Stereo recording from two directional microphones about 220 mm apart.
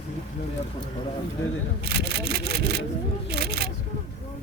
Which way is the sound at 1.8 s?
45° right (ahead or behind).